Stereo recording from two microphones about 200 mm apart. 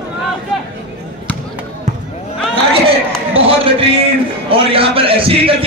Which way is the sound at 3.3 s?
30° right (ahead or behind).